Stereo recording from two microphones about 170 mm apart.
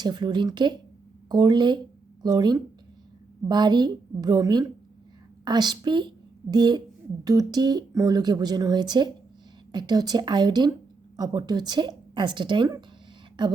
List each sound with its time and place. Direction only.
0.0 s a woman's voice: 25° right (ahead or behind)